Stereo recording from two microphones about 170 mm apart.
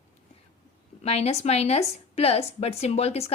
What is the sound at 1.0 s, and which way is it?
A woman's voice, 35° left (ahead or behind).